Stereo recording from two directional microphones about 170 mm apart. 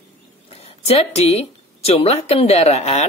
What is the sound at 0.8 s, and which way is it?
A woman's voice, 40° left (ahead or behind).